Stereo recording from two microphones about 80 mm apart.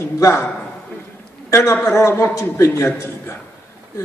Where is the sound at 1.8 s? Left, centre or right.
Left.